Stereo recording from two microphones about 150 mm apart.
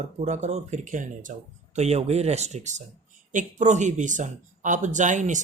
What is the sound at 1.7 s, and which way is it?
Speech, 45° right (ahead or behind).